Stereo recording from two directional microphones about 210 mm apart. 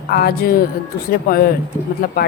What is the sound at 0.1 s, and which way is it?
Speech, 45° left (ahead or behind).